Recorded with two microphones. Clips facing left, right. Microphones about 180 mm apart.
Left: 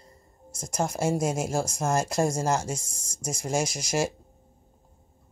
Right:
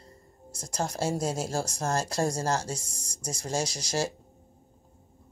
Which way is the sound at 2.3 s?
55° left (ahead or behind).